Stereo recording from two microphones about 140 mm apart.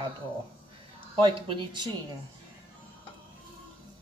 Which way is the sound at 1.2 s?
35° right (ahead or behind).